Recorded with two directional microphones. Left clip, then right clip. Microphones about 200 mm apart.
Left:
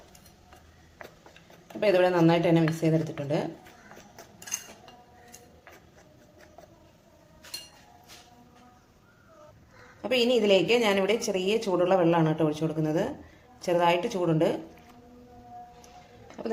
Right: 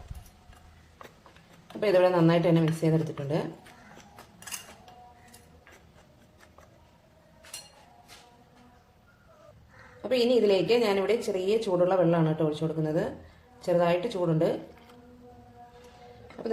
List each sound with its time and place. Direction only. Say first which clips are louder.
1.8 s speech: even; 10° left (ahead or behind)
10.3 s speech: left 1 dB; 20° left (ahead or behind)
16.4 s speech: right 1 dB; 10° left (ahead or behind)